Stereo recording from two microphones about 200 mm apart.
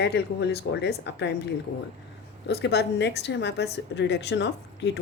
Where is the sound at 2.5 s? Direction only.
55° left (ahead or behind).